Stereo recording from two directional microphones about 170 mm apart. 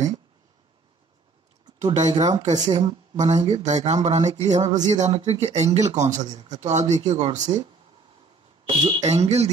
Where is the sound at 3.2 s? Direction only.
40° right (ahead or behind).